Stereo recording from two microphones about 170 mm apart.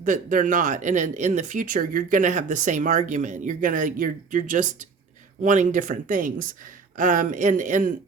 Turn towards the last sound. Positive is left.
turn(degrees=-50)  # may be behind; listen again after turning